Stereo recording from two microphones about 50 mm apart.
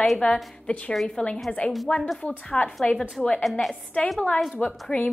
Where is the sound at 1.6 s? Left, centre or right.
Left.